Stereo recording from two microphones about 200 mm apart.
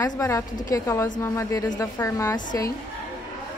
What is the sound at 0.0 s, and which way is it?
A woman's voice, 15° left (ahead or behind).